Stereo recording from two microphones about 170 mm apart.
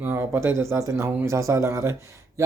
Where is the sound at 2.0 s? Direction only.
15° right (ahead or behind).